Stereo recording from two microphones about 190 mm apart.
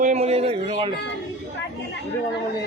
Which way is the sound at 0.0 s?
40° right (ahead or behind).